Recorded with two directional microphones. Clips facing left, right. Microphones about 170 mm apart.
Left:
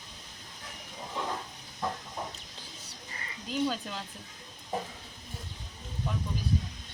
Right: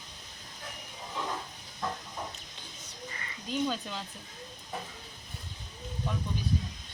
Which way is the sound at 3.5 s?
5° left (ahead or behind).